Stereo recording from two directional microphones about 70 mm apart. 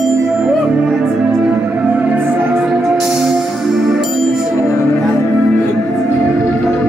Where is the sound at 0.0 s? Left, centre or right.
Centre.